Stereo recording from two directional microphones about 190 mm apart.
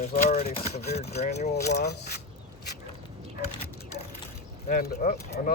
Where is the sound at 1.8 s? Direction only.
55° left (ahead or behind).